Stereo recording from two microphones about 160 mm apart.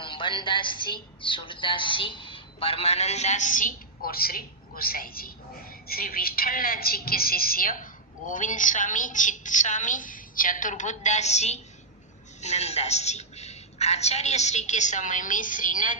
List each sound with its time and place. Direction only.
0.0 s a woman's voice: 30° left (ahead or behind); by 16.0 s 55° left (ahead or behind)